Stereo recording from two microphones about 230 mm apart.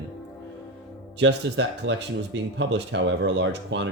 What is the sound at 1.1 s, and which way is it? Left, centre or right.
Speech, right.